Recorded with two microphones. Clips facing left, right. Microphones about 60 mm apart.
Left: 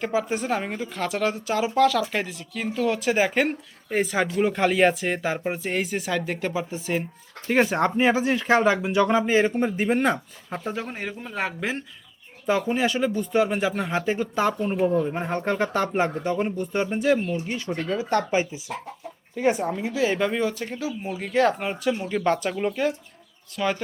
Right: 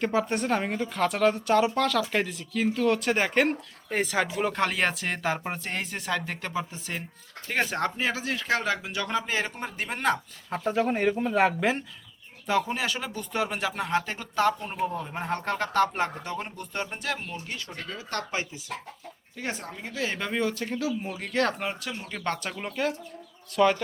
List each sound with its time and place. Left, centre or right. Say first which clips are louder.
0.0 s speech: left 1 dB; centre
11.1 s speech: right 6 dB; centre
17.3 s speech: left 9 dB; centre